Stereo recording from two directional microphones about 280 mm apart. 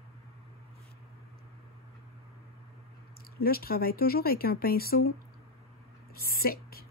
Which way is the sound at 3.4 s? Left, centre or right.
Left.